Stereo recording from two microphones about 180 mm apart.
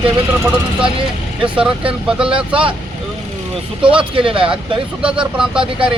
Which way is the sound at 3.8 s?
30° right (ahead or behind).